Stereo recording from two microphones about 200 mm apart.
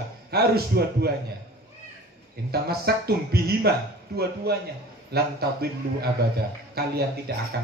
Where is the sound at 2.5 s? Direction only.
50° right (ahead or behind).